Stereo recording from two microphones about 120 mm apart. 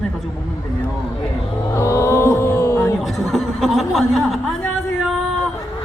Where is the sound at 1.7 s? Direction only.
25° left (ahead or behind).